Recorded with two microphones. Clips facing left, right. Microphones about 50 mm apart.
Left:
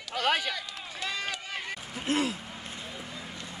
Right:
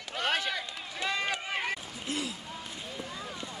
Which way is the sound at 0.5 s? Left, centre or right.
Centre.